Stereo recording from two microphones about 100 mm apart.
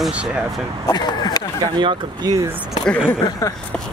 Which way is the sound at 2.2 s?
40° right (ahead or behind).